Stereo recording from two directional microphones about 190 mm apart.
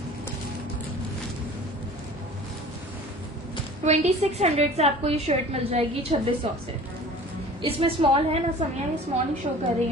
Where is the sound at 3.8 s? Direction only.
35° right (ahead or behind).